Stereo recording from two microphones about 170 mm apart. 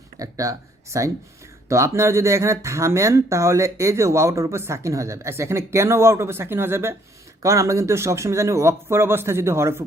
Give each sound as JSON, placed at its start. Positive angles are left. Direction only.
{"t": 0.2, "sound": "speech", "side_deg": -20}